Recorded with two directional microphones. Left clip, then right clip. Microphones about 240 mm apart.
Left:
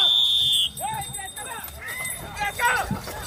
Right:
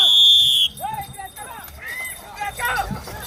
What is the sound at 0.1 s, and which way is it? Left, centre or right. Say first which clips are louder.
Fire alarm: right 7 dB; right.